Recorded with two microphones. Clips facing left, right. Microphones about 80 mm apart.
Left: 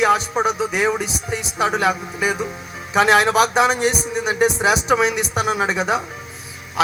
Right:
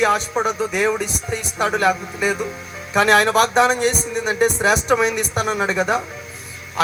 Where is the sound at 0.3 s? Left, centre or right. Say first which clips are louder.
Even; centre.